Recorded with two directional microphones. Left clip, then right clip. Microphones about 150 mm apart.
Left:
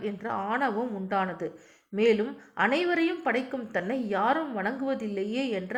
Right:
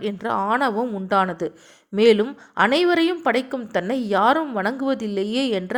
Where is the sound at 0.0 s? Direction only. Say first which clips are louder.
Right 8 dB; 25° right (ahead or behind).